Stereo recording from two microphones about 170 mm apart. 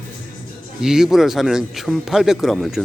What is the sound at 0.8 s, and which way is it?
Speech, 5° right (ahead or behind).